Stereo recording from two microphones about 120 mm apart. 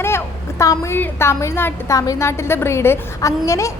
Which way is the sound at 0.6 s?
25° left (ahead or behind).